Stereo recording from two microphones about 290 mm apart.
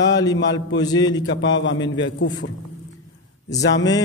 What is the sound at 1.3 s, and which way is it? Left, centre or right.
A man's voice, left.